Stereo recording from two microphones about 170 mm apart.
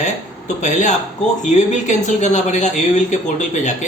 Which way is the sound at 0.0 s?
45° left (ahead or behind).